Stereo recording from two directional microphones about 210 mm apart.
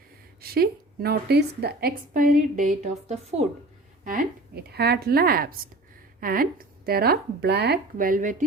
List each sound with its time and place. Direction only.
0.4 s a woman's voice: 45° right (ahead or behind)